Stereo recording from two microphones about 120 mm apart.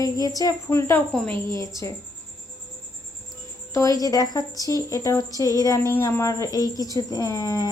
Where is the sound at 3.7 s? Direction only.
30° left (ahead or behind).